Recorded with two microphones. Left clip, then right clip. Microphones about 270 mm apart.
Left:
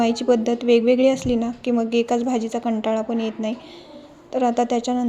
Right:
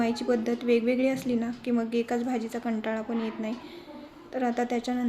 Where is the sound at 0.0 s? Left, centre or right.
Left.